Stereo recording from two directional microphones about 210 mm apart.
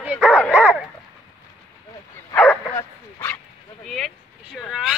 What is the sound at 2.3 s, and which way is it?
Bow-wow, 5° left (ahead or behind).